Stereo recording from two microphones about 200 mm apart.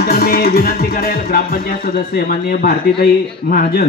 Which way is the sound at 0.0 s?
50° left (ahead or behind).